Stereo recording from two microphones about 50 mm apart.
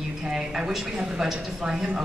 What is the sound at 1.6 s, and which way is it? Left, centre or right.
Speech, centre.